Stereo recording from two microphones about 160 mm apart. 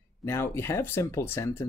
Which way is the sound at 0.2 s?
15° left (ahead or behind).